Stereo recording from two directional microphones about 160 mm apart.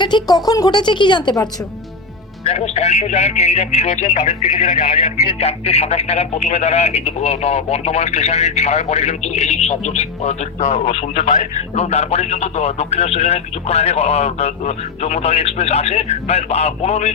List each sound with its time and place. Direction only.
0.0 s speech: 25° left (ahead or behind)
2.4 s speech: 40° left (ahead or behind)
4.9 s speech: 35° left (ahead or behind)